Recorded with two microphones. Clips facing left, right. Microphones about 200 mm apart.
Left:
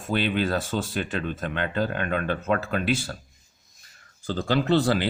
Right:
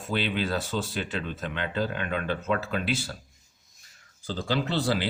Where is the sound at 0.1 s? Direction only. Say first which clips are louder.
Left 4 dB; 50° left (ahead or behind).